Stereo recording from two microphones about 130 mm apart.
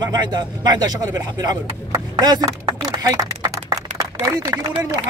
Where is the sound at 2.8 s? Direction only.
30° right (ahead or behind).